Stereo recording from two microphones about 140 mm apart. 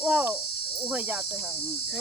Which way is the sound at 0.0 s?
10° right (ahead or behind).